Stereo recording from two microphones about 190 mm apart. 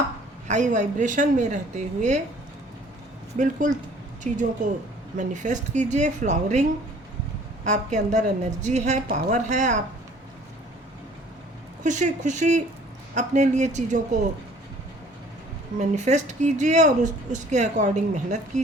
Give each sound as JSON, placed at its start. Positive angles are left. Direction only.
{"t": 0.4, "sound": "speech", "side_deg": -40}
{"t": 3.3, "sound": "speech", "side_deg": -40}
{"t": 5.1, "sound": "speech", "side_deg": -40}
{"t": 11.8, "sound": "speech", "side_deg": -40}
{"t": 15.8, "sound": "speech", "side_deg": -40}